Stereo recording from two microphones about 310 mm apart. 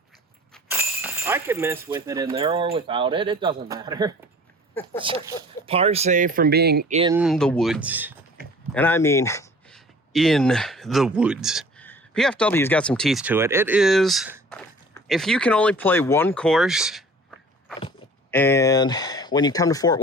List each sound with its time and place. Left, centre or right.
0.5 s speech: centre; by 7.1 s right
7.1 s speech: centre
8.7 s speech: centre
17.7 s speech: centre